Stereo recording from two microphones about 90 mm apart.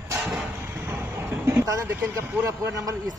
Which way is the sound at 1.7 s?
35° right (ahead or behind).